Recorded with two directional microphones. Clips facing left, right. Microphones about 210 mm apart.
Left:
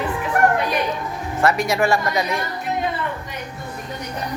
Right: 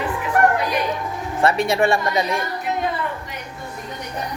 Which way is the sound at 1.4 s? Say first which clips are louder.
Right 1 dB; 30° right (ahead or behind).